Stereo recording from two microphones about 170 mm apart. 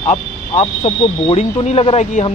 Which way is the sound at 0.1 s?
40° left (ahead or behind).